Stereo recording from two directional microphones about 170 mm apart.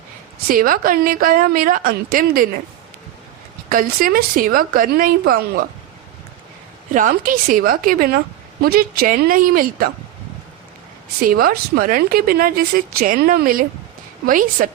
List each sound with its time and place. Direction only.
0.4 s speech: 55° right (ahead or behind)
3.7 s speech: 55° right (ahead or behind)
6.9 s speech: 55° right (ahead or behind)
11.2 s a woman's voice: 60° right (ahead or behind)